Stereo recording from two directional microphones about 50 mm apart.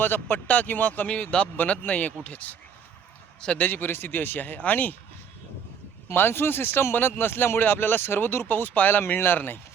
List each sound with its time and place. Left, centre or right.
0.0 s speech: left
1.0 s speech: left
3.6 s speech: left
6.1 s speech: left